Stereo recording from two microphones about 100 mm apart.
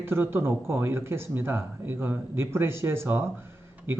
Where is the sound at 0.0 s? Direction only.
25° right (ahead or behind).